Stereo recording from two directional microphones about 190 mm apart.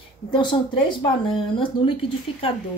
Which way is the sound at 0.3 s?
25° left (ahead or behind).